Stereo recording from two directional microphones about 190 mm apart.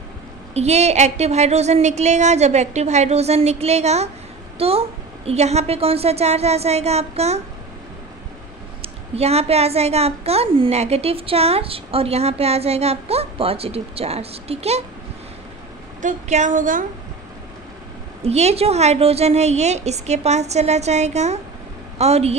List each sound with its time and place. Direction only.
0.6 s a woman's voice: 35° right (ahead or behind)
8.8 s a woman's voice: 35° right (ahead or behind)
16.0 s a woman's voice: 40° right (ahead or behind)
18.2 s a woman's voice: 35° right (ahead or behind)